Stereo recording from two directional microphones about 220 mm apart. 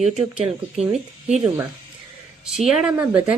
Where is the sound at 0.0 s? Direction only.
30° right (ahead or behind).